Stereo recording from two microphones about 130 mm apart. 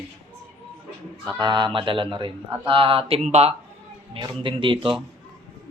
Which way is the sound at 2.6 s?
40° right (ahead or behind).